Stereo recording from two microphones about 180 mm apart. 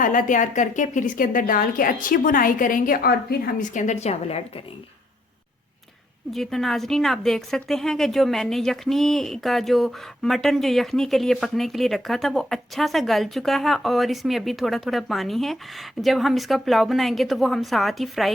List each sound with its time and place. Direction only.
0.0 s a woman's voice: 45° left (ahead or behind)
6.3 s a woman's voice: centre (ahead or behind)